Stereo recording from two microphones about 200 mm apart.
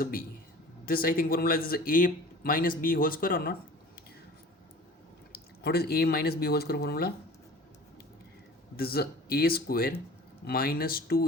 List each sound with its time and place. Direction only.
0.0 s speech: 45° left (ahead or behind)
5.3 s speech: 55° left (ahead or behind)
8.7 s speech: 50° left (ahead or behind)